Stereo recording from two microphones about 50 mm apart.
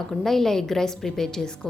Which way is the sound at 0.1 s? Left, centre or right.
Centre.